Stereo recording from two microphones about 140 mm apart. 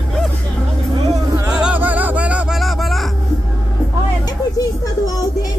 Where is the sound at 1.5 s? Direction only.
5° right (ahead or behind).